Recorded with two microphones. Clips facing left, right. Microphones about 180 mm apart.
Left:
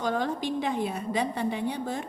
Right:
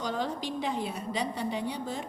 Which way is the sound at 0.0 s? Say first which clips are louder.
Left 4 dB; 55° left (ahead or behind).